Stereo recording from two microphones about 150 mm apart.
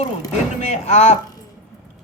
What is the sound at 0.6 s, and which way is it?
Speech, 50° left (ahead or behind).